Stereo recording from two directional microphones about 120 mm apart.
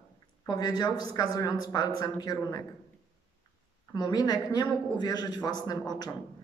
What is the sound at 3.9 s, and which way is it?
A woman's voice, 30° left (ahead or behind).